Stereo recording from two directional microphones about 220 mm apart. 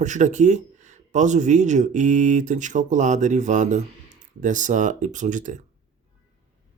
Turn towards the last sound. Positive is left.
turn(degrees=-35)  # may be behind; listen again after turning